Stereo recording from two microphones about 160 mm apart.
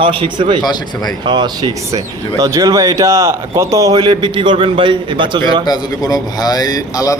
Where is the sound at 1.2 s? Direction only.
30° right (ahead or behind).